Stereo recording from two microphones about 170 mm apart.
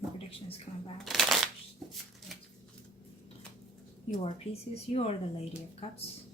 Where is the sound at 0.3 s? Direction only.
35° left (ahead or behind).